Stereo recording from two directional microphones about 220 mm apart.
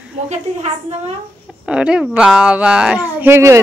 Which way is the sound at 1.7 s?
5° right (ahead or behind).